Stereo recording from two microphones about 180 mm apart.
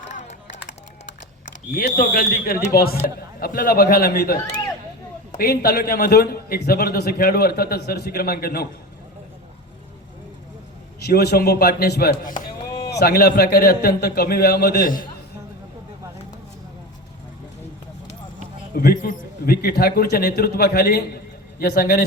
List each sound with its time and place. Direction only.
0.1 s a sound: 40° left (ahead or behind)
1.7 s a man's voice: 55° left (ahead or behind)
5.4 s a man's voice: 60° left (ahead or behind)
11.0 s a man's voice: 60° left (ahead or behind)
18.7 s a man's voice: 60° left (ahead or behind)